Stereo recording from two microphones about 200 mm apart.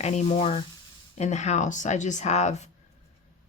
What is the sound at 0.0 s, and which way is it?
Speech, 35° left (ahead or behind).